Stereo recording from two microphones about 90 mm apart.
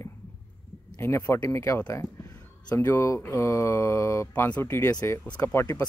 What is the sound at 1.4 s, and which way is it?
Speech, 35° left (ahead or behind).